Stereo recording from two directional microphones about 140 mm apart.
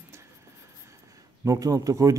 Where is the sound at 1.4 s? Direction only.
25° right (ahead or behind).